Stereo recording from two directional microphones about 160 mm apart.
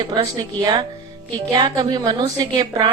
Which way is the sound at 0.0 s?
25° right (ahead or behind).